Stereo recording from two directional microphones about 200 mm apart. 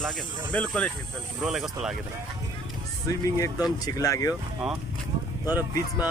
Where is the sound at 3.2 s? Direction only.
15° left (ahead or behind).